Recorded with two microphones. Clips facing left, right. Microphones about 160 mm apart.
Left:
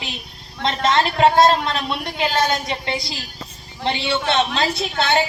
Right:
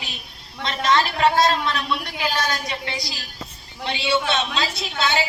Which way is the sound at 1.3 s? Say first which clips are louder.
Left 4 dB; 25° left (ahead or behind).